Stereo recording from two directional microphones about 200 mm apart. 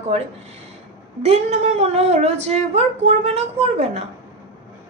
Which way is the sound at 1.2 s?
30° right (ahead or behind).